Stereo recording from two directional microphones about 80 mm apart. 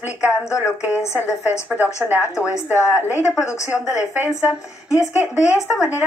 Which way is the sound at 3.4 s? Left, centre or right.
Left.